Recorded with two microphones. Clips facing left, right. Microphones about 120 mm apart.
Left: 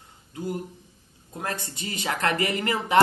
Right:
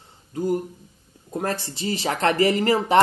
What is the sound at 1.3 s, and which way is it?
Speech, 40° right (ahead or behind).